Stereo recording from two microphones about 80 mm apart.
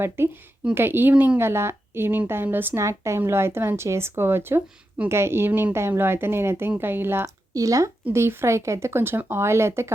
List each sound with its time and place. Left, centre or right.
0.2 s speech: right
1.1 s speech: centre
1.4 s speech: right
2.8 s speech: right
7.5 s speech: right
8.1 s speech: right